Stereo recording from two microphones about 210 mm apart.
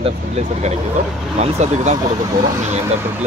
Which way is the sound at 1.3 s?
30° right (ahead or behind).